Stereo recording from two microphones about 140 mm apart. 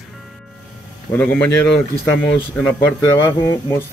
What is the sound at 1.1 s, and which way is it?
Speech, 15° left (ahead or behind).